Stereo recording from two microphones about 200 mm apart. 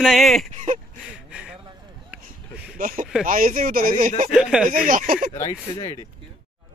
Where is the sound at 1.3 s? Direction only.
5° right (ahead or behind).